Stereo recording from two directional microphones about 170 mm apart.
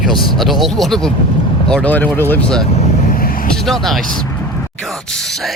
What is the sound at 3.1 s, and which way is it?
Vehicle, 55° left (ahead or behind).